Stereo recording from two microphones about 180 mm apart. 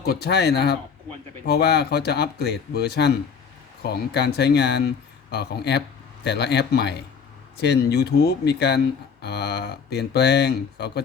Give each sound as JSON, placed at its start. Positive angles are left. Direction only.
{"t": 0.0, "sound": "speech", "side_deg": 65}